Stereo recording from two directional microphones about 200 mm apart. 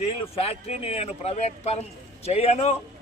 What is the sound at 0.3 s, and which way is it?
A man's voice, 30° left (ahead or behind).